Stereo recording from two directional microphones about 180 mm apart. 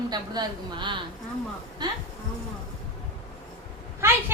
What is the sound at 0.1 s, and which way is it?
A woman's voice, 25° right (ahead or behind).